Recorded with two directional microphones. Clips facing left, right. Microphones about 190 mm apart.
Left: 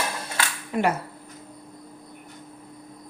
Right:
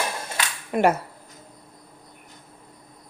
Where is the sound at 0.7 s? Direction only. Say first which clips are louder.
Right 4 dB; 55° right (ahead or behind).